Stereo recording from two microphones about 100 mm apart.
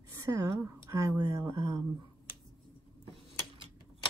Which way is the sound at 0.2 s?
30° right (ahead or behind).